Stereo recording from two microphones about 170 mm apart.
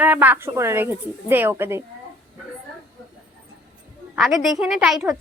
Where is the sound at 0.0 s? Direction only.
10° right (ahead or behind).